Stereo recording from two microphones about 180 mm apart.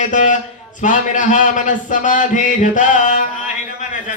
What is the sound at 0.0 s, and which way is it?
Speech, 45° left (ahead or behind).